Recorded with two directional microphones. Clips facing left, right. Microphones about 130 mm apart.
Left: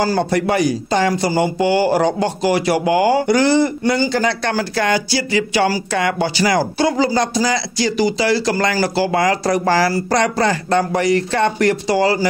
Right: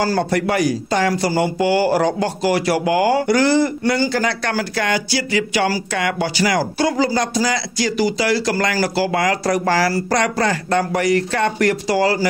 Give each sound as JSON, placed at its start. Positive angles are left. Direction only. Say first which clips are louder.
{"t": 0.0, "sound": "speech", "louder": "left 1 dB", "side_deg": 20}